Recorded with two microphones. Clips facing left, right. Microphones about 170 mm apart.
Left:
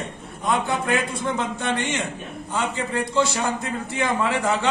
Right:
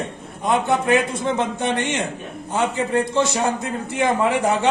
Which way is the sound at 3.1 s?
20° right (ahead or behind).